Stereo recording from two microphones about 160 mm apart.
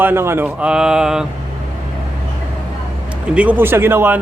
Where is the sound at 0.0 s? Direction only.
15° right (ahead or behind).